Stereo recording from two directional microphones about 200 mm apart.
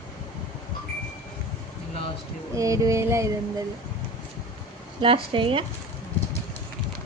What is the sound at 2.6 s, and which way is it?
Speech, 15° right (ahead or behind).